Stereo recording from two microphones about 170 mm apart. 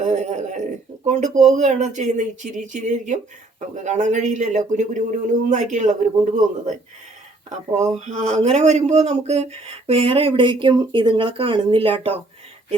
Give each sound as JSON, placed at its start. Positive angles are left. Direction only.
{"t": 0.0, "sound": "a sound", "side_deg": -45}
{"t": 1.0, "sound": "speech", "side_deg": -45}
{"t": 7.9, "sound": "speech", "side_deg": -40}